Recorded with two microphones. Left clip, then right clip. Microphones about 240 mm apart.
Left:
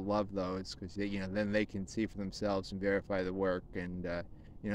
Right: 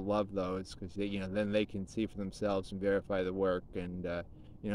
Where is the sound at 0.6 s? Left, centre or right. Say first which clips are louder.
Right 1 dB; right.